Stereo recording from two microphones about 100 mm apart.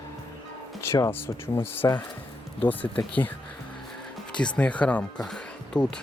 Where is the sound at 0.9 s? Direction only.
25° left (ahead or behind).